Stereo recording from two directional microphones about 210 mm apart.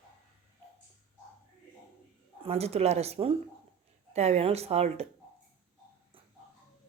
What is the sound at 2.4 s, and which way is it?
A woman's voice, 30° right (ahead or behind).